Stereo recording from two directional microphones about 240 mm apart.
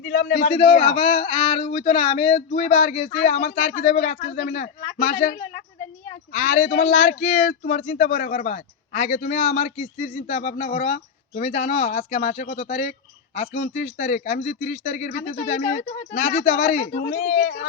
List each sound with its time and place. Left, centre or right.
0.0 s a man's voice: left
0.9 s speech: left